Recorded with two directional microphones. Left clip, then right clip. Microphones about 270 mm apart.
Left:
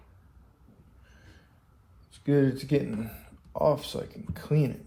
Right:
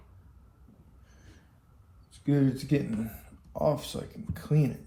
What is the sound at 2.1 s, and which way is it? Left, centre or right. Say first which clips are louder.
Speech: left 3 dB; left.